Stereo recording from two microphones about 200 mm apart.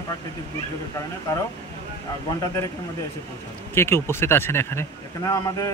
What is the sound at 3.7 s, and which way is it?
Speech, 10° left (ahead or behind).